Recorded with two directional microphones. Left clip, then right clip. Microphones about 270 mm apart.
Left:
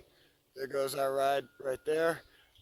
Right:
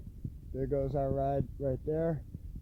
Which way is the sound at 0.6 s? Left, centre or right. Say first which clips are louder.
Even; centre.